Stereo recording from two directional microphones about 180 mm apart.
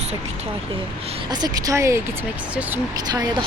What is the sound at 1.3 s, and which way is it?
Speech, 20° right (ahead or behind).